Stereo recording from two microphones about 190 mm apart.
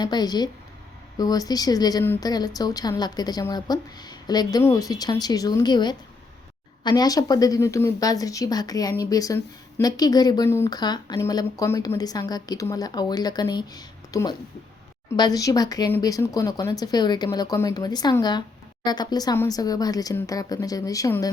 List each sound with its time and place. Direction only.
0.0 s speech: 20° left (ahead or behind)